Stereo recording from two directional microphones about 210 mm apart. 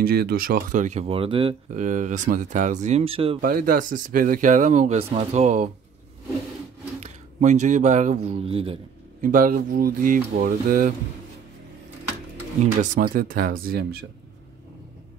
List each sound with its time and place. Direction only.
0.0 s speech: 45° right (ahead or behind); by 3.3 s 25° right (ahead or behind)
3.3 s speech: 40° right (ahead or behind)
7.0 s speech: 35° right (ahead or behind)
9.2 s speech: 40° right (ahead or behind)
12.6 s speech: 35° right (ahead or behind)